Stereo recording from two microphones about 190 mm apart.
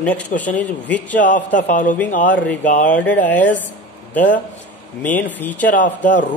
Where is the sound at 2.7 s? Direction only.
40° left (ahead or behind).